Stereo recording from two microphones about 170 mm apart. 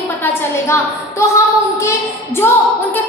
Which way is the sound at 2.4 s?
15° left (ahead or behind).